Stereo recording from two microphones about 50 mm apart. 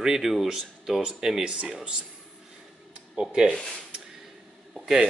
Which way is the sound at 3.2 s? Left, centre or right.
Centre.